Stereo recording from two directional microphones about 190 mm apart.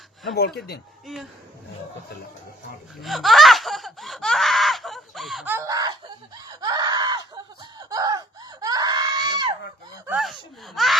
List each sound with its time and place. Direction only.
0.3 s speech: 55° left (ahead or behind)
1.0 s speech: centre (ahead or behind)
3.0 s a sound: centre (ahead or behind)
5.5 s screaming: 15° right (ahead or behind)
10.1 s speech: centre (ahead or behind)